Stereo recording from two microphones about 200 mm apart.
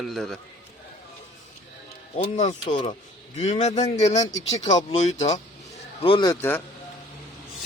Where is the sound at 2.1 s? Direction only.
35° left (ahead or behind); by 6.6 s 10° left (ahead or behind).